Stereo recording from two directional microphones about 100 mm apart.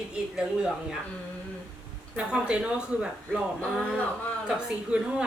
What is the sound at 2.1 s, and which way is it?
Speech, 10° right (ahead or behind).